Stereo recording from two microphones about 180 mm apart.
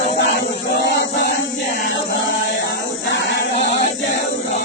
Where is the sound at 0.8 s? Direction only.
80° left.